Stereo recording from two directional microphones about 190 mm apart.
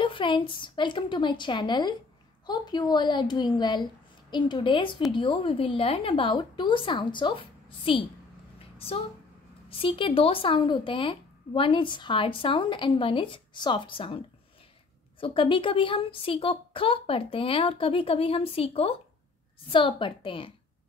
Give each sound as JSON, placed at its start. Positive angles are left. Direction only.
{"t": 0.0, "sound": "speech", "side_deg": 25}
{"t": 8.5, "sound": "a sound", "side_deg": 30}
{"t": 9.7, "sound": "speech", "side_deg": 30}